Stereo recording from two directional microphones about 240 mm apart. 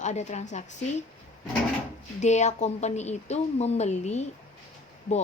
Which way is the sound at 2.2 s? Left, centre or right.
Left.